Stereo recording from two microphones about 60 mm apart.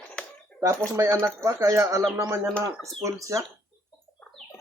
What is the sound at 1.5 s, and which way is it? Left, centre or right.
Speech, right.